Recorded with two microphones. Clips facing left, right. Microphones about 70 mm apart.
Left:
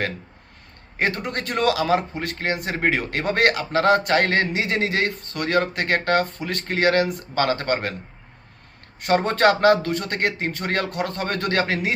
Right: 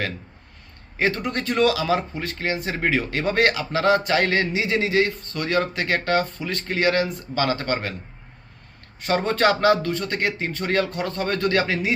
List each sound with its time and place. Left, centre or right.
0.9 s a man's voice: left
9.0 s a man's voice: left